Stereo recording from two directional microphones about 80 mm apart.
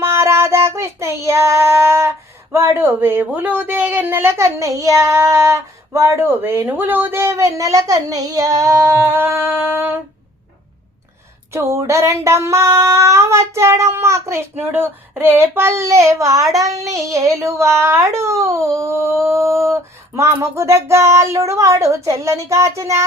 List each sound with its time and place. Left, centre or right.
0.0 s child singing: right
11.5 s child singing: right
16.6 s female singing: right
17.1 s child singing: right